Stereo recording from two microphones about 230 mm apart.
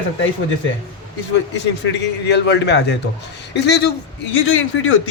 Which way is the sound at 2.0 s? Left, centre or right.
Left.